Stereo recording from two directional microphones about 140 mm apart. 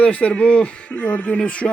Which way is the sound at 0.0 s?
10° left (ahead or behind).